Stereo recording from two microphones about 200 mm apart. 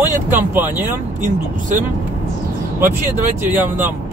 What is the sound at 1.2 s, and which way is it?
Speech, 40° right (ahead or behind).